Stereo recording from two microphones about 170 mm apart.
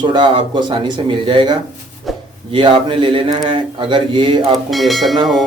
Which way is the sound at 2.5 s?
30° right (ahead or behind).